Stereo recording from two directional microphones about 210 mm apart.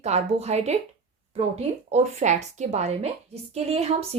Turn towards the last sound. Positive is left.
turn(degrees=-30)  # may be behind; listen again after turning